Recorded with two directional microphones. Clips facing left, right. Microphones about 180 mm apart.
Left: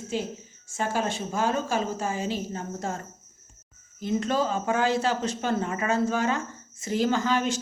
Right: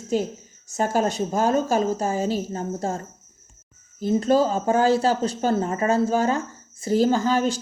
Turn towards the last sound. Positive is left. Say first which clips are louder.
# right 4 dB
turn(degrees=-35)  # may be behind; listen again after turning